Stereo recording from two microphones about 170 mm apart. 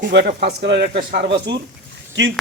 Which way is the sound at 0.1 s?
70° right (ahead or behind).